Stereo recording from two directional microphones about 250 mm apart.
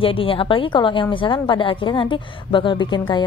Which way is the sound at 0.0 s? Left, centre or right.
Left.